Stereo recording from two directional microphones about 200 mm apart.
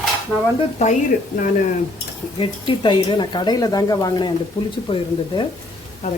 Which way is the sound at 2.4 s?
25° left (ahead or behind).